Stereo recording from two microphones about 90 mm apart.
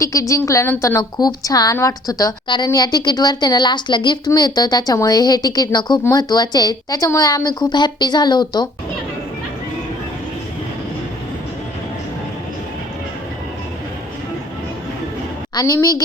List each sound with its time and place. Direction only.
0.0 s a woman's voice: 35° left (ahead or behind)
1.1 s a woman's voice: 45° left (ahead or behind)
2.7 s a woman's voice: 50° left (ahead or behind)
15.5 s a woman's voice: 40° left (ahead or behind)